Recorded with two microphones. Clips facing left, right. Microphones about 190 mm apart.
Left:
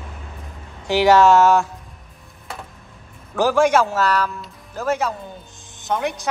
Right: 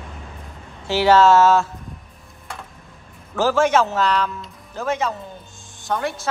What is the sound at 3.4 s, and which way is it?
Speech, 15° left (ahead or behind).